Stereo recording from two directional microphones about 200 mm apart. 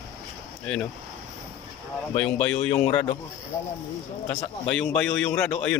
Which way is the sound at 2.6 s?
10° left (ahead or behind).